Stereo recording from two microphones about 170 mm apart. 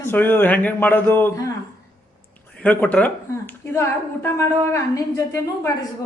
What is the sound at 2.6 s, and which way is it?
A man's voice, 10° left (ahead or behind).